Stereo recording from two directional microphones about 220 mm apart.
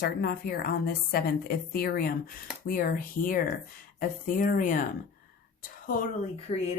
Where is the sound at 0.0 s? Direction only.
45° left (ahead or behind).